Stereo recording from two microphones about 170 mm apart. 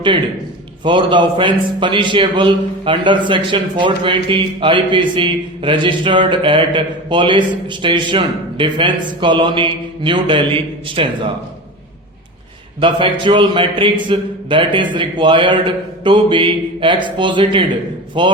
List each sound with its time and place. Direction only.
0.9 s a man's voice: 30° right (ahead or behind)
12.8 s a man's voice: 30° right (ahead or behind)